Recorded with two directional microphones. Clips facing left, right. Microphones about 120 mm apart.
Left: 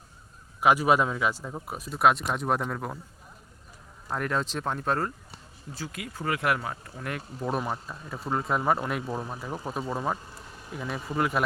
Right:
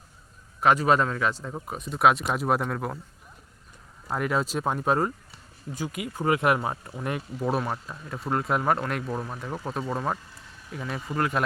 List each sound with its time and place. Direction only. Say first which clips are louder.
0.6 s a man's voice: right 1 dB; 10° left (ahead or behind)
4.1 s speech: right 3 dB; 5° right (ahead or behind); by 7.2 s 20° right (ahead or behind)
7.3 s speech: right 1 dB; 5° right (ahead or behind)